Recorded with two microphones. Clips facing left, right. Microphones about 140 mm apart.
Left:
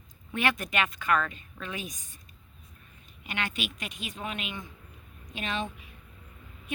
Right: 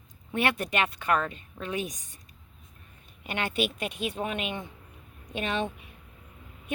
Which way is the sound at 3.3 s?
50° right (ahead or behind).